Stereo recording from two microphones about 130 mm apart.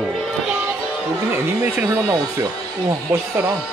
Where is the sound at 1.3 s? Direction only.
15° right (ahead or behind).